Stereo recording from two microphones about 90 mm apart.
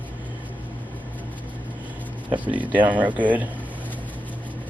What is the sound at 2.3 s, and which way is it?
Speech, 15° right (ahead or behind).